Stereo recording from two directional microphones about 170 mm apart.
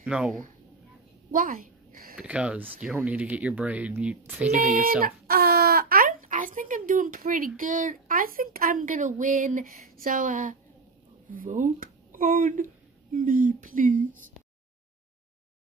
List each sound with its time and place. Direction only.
0.0 s speech: 5° right (ahead or behind)
1.3 s a sound: 55° right (ahead or behind)
2.1 s speech: 5° right (ahead or behind)
5.0 s speech: 65° right (ahead or behind)